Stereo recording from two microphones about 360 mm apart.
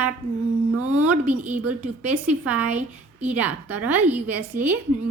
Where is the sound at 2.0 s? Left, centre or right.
Centre.